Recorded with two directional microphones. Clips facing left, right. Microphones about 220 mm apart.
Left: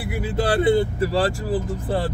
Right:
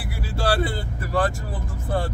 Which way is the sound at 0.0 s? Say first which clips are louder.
Left 4 dB; 20° left (ahead or behind).